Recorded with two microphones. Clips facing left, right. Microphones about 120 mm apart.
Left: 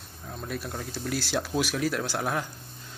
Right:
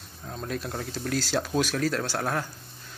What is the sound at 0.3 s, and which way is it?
Speech, 5° left (ahead or behind).